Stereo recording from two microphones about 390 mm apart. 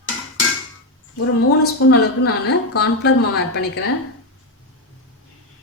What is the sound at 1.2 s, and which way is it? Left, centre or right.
A woman's voice, left.